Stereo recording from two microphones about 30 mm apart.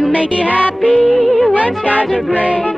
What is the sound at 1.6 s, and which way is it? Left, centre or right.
Speech, right.